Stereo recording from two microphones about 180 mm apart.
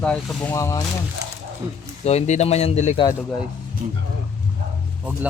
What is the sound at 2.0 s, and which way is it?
Speech, 35° left (ahead or behind).